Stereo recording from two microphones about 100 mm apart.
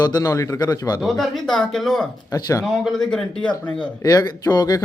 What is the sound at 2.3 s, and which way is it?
Speech, 35° left (ahead or behind).